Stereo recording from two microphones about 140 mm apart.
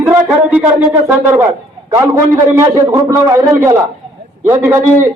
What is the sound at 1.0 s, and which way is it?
A man's voice, 15° right (ahead or behind).